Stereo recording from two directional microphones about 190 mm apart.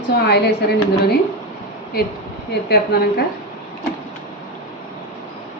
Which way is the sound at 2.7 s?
55° left (ahead or behind).